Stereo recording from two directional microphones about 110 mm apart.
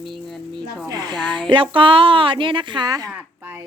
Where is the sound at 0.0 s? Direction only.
Centre (ahead or behind).